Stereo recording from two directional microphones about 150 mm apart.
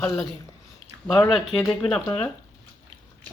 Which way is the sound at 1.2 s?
Centre (ahead or behind).